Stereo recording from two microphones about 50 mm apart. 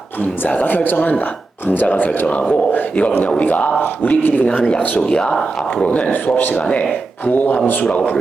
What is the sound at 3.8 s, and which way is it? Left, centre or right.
Speech, left.